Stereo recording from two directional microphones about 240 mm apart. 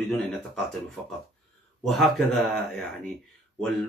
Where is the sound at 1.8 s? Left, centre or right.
Centre.